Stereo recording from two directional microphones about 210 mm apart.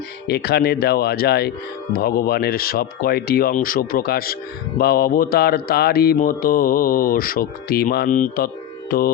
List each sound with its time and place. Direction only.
0.3 s mantra: 50° left (ahead or behind)